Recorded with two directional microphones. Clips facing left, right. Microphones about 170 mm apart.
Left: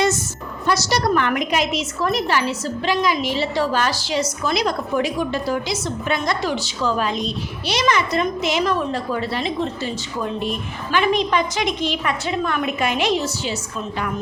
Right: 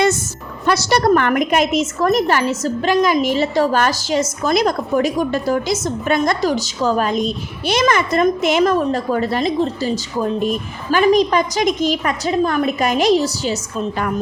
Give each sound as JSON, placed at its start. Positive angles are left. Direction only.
{"t": 0.6, "sound": "a woman's voice", "side_deg": -60}